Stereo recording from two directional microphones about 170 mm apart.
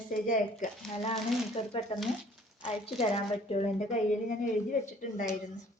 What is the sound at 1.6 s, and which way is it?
A woman's voice, 40° left (ahead or behind).